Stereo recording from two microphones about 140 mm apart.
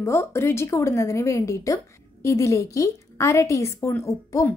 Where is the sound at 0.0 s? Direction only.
20° left (ahead or behind).